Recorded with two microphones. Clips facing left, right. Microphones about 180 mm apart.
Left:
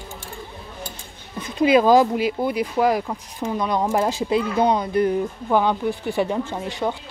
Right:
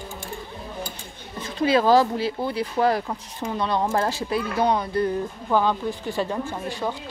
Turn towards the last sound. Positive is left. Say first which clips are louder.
# left 3 dB
turn(degrees=20)  # may be behind; listen again after turning